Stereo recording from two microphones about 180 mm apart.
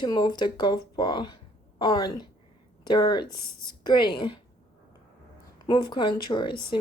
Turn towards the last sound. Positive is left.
turn(degrees=25)  # may be behind; listen again after turning